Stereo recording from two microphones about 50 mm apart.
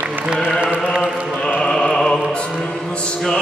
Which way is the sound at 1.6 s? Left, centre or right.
Centre.